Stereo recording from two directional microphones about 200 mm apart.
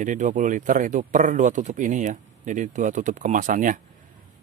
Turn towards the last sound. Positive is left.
turn(degrees=-40)  # may be behind; listen again after turning